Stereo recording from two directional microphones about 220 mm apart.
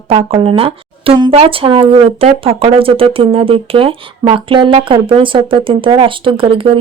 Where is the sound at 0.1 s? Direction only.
25° right (ahead or behind).